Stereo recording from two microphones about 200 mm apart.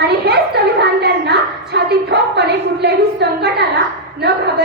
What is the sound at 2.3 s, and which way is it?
A woman's voice, 55° right (ahead or behind).